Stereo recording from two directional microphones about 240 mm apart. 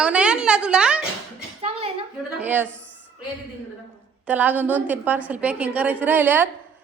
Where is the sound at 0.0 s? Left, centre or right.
Centre.